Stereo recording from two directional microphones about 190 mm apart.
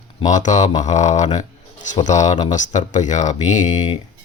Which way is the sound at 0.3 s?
40° left (ahead or behind).